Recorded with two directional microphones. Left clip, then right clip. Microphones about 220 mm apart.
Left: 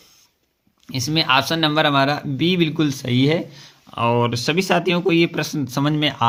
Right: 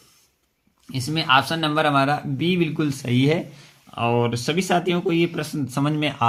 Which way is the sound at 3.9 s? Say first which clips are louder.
Left 3 dB; 30° left (ahead or behind).